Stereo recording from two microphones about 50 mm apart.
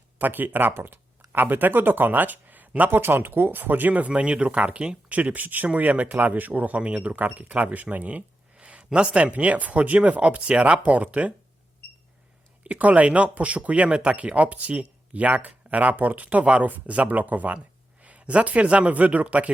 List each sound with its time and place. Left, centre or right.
0.2 s speech: right
5.1 s speech: right
8.5 s a sound: right
9.1 s speech: right
12.6 s speech: right